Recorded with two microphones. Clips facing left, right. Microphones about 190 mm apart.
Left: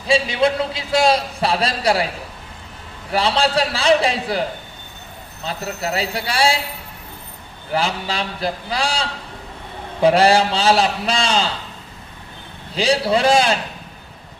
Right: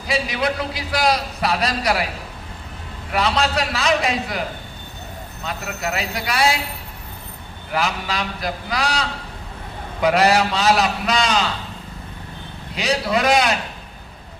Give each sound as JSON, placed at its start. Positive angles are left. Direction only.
{"t": 0.1, "sound": "a man's voice", "side_deg": 25}
{"t": 3.1, "sound": "a man's voice", "side_deg": 30}
{"t": 5.5, "sound": "a man's voice", "side_deg": 30}
{"t": 7.7, "sound": "a man's voice", "side_deg": 30}
{"t": 12.7, "sound": "a man's voice", "side_deg": 30}